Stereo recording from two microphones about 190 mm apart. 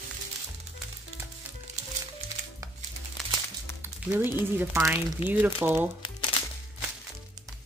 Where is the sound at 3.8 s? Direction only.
10° right (ahead or behind).